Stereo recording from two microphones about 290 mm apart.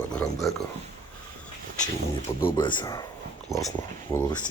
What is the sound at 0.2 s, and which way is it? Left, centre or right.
Speech, centre.